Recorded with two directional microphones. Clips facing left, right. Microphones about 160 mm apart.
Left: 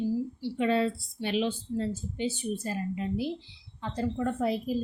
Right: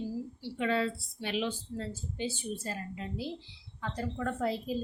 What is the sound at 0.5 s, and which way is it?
A woman's voice, 30° left (ahead or behind).